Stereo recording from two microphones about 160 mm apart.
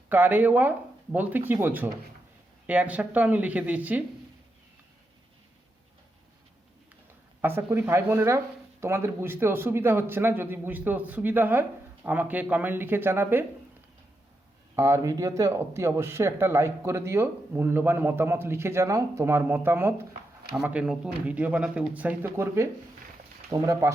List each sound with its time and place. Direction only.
0.1 s speech: 10° right (ahead or behind)
7.4 s speech: 15° right (ahead or behind)
14.8 s speech: 15° right (ahead or behind)